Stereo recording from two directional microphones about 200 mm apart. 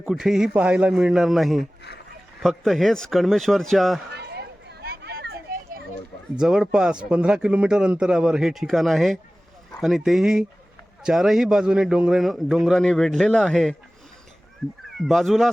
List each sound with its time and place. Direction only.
0.0 s a man's voice: centre (ahead or behind)
4.1 s a sound: 55° right (ahead or behind)
6.4 s a man's voice: 5° right (ahead or behind)
15.0 s a man's voice: centre (ahead or behind)